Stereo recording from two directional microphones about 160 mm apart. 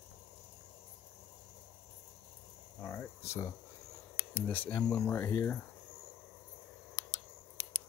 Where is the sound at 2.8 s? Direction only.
15° left (ahead or behind).